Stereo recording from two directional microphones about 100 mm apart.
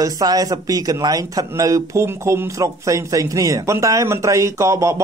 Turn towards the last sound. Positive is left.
turn(degrees=-30)  # may be behind; listen again after turning